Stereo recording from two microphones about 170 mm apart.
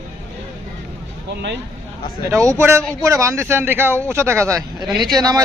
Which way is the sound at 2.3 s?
15° right (ahead or behind).